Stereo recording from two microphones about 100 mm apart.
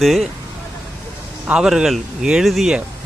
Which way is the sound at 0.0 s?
Centre (ahead or behind).